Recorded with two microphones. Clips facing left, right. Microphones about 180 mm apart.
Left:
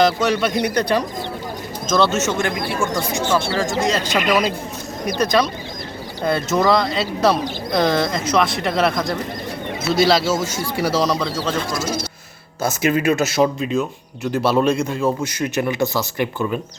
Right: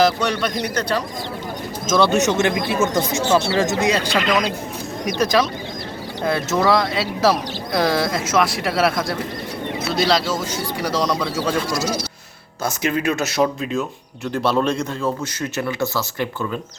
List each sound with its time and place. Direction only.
0.0 s a man's voice: 5° left (ahead or behind)
1.9 s speech: 10° right (ahead or behind)
4.2 s speech: 5° left (ahead or behind)
11.7 s speech: 50° left (ahead or behind)
12.6 s a man's voice: 5° left (ahead or behind)